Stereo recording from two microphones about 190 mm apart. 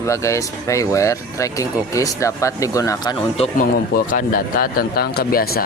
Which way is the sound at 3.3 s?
30° left (ahead or behind).